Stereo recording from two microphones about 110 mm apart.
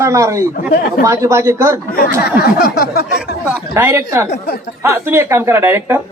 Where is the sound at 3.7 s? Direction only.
25° right (ahead or behind).